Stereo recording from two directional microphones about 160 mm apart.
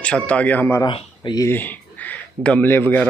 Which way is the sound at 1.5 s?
10° left (ahead or behind).